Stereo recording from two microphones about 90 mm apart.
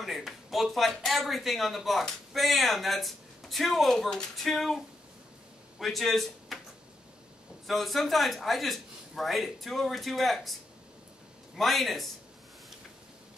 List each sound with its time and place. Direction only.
0.0 s speech: centre (ahead or behind)
7.6 s speech: centre (ahead or behind)